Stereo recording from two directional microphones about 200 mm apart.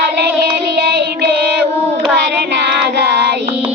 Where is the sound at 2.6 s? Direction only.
60° right (ahead or behind).